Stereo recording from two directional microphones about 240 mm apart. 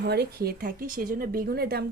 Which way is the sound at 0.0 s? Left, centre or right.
Right.